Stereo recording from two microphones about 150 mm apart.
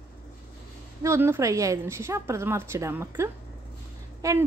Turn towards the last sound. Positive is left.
turn(degrees=-20)  # may be behind; listen again after turning